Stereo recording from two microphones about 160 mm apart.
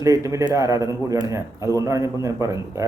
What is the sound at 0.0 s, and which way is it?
Speech, 20° right (ahead or behind).